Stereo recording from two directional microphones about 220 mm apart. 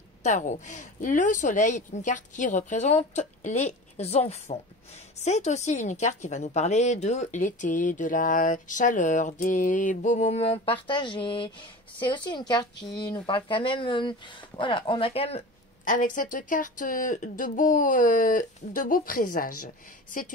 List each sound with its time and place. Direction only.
0.2 s a woman's voice: 35° left (ahead or behind)